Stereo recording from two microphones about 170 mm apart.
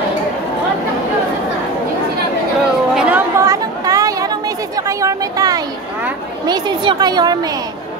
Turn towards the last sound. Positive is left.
turn(degrees=-25)  # may be behind; listen again after turning